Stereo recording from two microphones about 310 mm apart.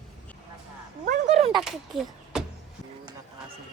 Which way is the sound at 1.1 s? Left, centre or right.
Right.